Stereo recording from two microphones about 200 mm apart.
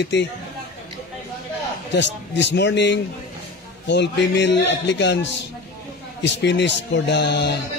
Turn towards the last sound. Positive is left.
turn(degrees=60)  # may be behind; listen again after turning